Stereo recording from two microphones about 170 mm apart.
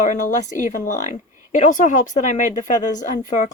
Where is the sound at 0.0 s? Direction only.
45° left (ahead or behind).